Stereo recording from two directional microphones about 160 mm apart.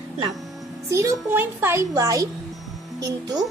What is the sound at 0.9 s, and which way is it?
A woman's voice, 20° right (ahead or behind).